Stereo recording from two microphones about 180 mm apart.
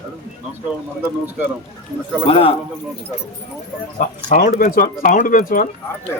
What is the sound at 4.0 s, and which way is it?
Speech, 50° left (ahead or behind).